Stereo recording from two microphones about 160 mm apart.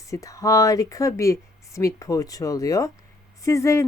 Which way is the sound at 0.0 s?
20° left (ahead or behind).